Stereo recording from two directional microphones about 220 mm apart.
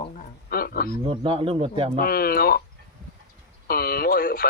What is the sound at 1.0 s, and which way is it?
Speech, 25° right (ahead or behind).